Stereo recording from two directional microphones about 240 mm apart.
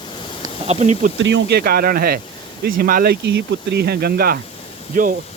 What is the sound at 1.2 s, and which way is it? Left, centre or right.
Speech, right.